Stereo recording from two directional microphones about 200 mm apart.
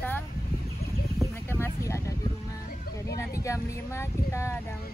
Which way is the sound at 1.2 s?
15° left (ahead or behind).